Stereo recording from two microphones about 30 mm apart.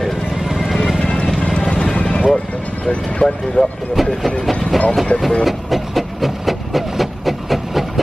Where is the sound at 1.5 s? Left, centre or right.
Left.